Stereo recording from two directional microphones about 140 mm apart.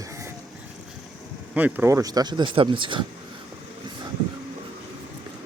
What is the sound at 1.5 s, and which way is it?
Speech, 15° right (ahead or behind).